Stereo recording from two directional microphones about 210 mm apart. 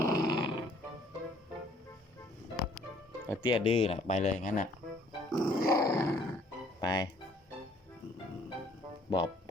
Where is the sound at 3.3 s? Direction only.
20° left (ahead or behind); by 4.7 s 40° left (ahead or behind).